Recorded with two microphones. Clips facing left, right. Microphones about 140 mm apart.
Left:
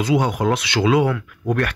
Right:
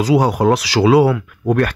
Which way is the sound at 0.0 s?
35° right (ahead or behind).